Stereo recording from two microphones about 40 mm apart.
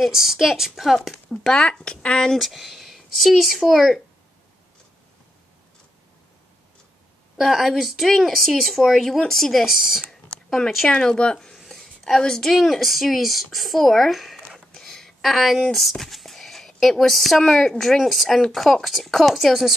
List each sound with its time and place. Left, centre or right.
0.0 s a woman's voice: centre
1.5 s speech: centre
2.3 s speech: centre
7.3 s speech: centre
9.7 s a woman's voice: centre
10.9 s speech: left
11.5 s a sound: centre
12.2 s speech: centre
12.4 s speech: centre